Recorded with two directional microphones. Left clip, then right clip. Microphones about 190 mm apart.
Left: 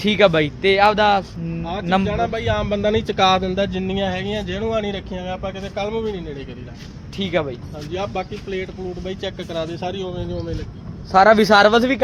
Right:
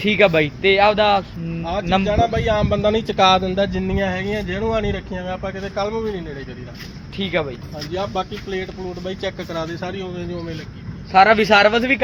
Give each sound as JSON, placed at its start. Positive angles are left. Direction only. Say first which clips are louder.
{"t": 0.0, "sound": "speech", "louder": "even", "side_deg": 15}
{"t": 1.6, "sound": "speech", "louder": "right 1 dB", "side_deg": -35}
{"t": 2.6, "sound": "speech", "louder": "right 1 dB", "side_deg": 5}
{"t": 7.2, "sound": "speech", "louder": "even", "side_deg": 20}
{"t": 7.9, "sound": "speech", "louder": "right 1 dB", "side_deg": -35}
{"t": 9.0, "sound": "speech", "louder": "right 3 dB", "side_deg": -25}
{"t": 11.2, "sound": "speech", "louder": "even", "side_deg": 5}
{"t": 11.5, "sound": "speech", "louder": "left 1 dB", "side_deg": 25}